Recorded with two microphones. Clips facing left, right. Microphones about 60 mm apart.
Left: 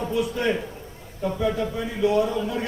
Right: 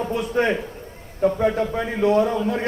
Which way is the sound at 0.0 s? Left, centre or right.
Right.